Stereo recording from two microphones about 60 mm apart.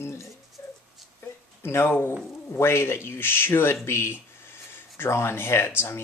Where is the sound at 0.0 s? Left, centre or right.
Left.